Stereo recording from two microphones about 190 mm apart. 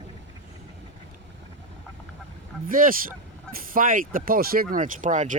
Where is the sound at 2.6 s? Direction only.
45° right (ahead or behind).